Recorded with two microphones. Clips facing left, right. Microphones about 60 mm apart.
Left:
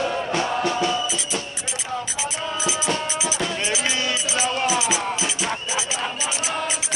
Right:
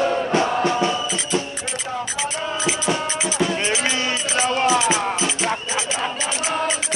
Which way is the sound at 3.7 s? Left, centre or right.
Right.